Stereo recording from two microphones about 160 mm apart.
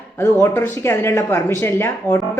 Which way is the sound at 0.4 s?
15° left (ahead or behind).